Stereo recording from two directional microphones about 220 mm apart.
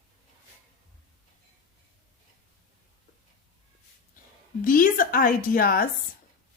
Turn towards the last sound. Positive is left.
turn(degrees=40)  # may be behind; listen again after turning